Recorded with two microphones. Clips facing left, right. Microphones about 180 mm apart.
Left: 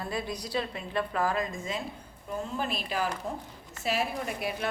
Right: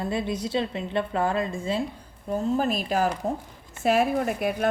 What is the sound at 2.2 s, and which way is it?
A woman's voice, 45° right (ahead or behind).